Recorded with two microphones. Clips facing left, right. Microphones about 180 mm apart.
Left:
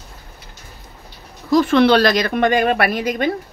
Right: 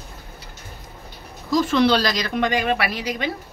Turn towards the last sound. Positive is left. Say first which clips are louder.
# left 7 dB
turn(degrees=50)  # may be behind; listen again after turning